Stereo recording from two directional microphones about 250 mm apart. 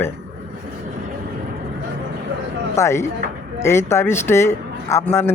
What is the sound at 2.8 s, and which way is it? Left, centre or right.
Speech, centre.